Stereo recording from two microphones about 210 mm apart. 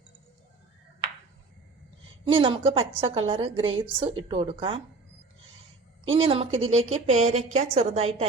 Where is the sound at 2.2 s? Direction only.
25° right (ahead or behind).